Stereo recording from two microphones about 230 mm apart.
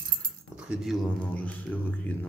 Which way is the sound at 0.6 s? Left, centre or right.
Centre.